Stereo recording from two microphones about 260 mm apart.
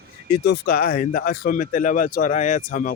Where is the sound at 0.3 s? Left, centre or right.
Left.